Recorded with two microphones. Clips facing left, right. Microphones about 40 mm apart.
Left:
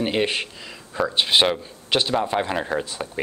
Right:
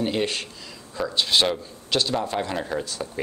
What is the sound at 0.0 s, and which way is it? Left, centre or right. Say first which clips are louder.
A man's voice: left 3 dB; left.